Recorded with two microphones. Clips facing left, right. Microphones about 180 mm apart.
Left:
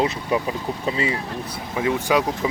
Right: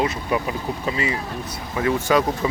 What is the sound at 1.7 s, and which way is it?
Speech, 10° left (ahead or behind).